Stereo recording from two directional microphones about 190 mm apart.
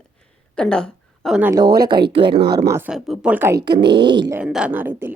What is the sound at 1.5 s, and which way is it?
A woman's voice, 20° right (ahead or behind).